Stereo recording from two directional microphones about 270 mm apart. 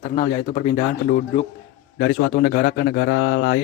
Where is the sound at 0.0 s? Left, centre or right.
Left.